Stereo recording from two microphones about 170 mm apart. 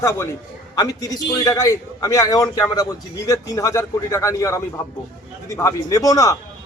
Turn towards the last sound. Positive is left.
turn(degrees=20)  # may be behind; listen again after turning